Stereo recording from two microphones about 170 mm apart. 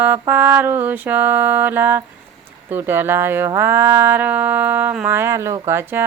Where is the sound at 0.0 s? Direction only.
10° right (ahead or behind).